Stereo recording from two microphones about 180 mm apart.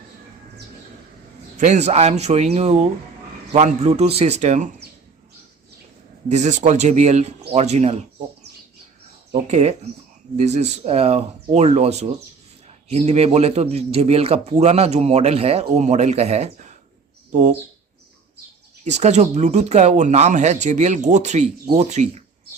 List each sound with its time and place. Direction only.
1.5 s speech: 40° right (ahead or behind)
6.2 s speech: 40° right (ahead or behind)
9.5 s speech: 40° right (ahead or behind)
18.9 s speech: 40° right (ahead or behind)